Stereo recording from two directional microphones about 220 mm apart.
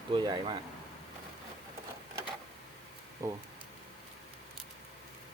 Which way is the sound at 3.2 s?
15° right (ahead or behind).